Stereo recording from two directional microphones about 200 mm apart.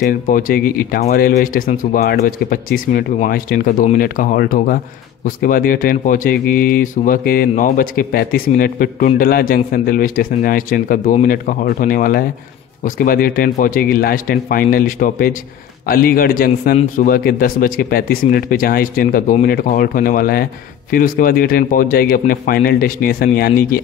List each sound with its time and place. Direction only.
0.0 s speech: 45° left (ahead or behind)